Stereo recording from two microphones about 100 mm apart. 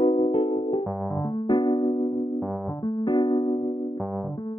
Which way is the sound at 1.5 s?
50° left (ahead or behind).